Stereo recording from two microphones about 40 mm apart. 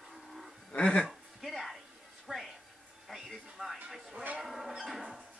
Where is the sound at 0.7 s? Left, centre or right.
Left.